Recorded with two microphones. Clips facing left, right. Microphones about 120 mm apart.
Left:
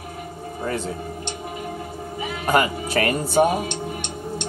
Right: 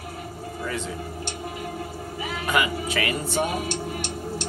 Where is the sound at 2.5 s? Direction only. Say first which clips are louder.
Left 5 dB; 40° left (ahead or behind).